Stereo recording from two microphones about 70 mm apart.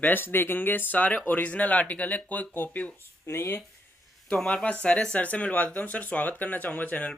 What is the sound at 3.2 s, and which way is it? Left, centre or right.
Speech, left.